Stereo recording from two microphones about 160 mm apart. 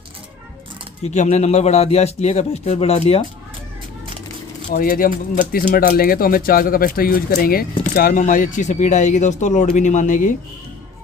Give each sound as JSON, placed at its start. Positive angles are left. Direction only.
{"t": 1.0, "sound": "a man's voice", "side_deg": 45}
{"t": 4.7, "sound": "speech", "side_deg": 70}